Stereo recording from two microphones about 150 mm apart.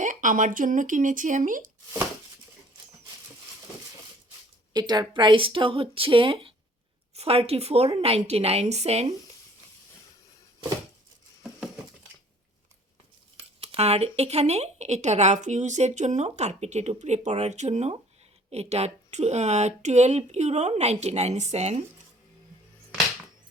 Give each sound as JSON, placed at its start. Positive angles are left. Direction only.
{"t": 0.0, "sound": "speech", "side_deg": -60}
{"t": 4.7, "sound": "speech", "side_deg": -30}
{"t": 13.6, "sound": "speech", "side_deg": -40}